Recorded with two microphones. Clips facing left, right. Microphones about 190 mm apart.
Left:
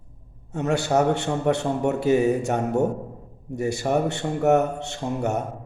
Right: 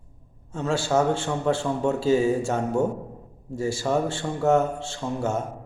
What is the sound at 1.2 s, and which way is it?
A man's voice, 20° left (ahead or behind).